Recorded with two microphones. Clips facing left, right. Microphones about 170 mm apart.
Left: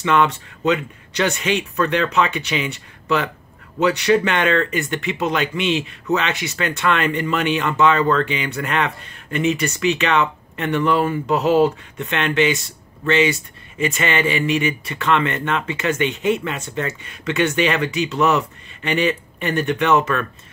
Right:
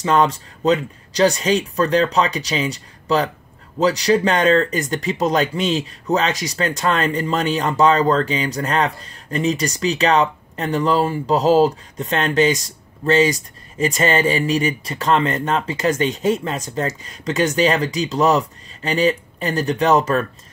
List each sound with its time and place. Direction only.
0.0 s speech: 35° right (ahead or behind)